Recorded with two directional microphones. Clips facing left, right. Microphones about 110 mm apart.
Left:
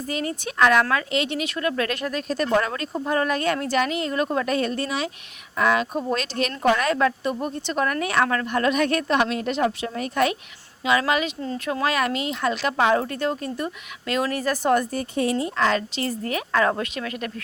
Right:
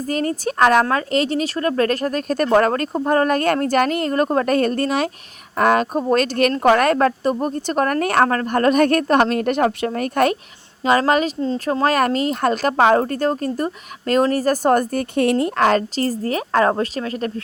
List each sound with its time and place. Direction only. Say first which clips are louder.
0.1 s speech: right 7 dB; 45° right (ahead or behind)